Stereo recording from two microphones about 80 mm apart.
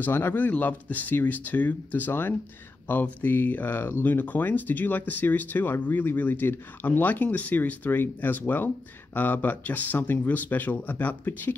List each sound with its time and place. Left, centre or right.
0.0 s speech: left